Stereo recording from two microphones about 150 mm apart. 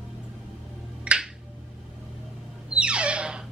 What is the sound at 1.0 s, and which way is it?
Finger snapping, 5° right (ahead or behind).